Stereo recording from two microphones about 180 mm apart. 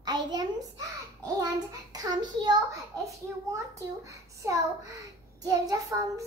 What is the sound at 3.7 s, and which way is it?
A child's voice, 15° right (ahead or behind).